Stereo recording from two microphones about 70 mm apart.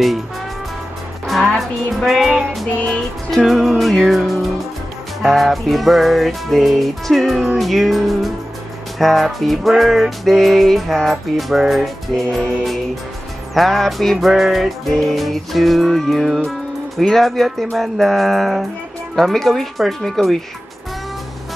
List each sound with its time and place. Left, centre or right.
1.2 s music: centre